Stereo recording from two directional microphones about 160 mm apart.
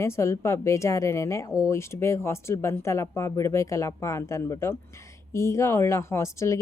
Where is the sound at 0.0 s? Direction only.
15° left (ahead or behind).